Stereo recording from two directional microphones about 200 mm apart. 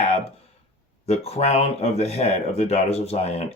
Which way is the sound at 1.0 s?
30° left (ahead or behind).